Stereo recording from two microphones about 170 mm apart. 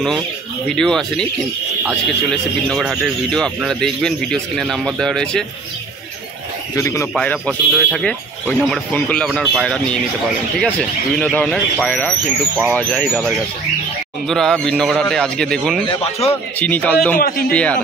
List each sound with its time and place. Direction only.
0.7 s speech: 5° left (ahead or behind)
2.7 s speech: centre (ahead or behind)
6.7 s speech: 15° left (ahead or behind)
7.2 s speech: 5° left (ahead or behind)
11.1 s a man's voice: 5° left (ahead or behind)
14.3 s a man's voice: centre (ahead or behind)